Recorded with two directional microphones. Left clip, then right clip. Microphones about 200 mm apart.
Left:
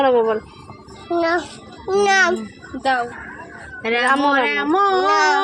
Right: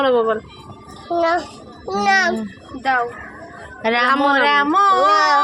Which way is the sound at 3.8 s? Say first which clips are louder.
Right 1 dB; 45° right (ahead or behind).